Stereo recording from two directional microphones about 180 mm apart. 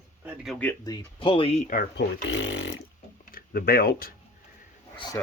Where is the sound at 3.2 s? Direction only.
50° left (ahead or behind).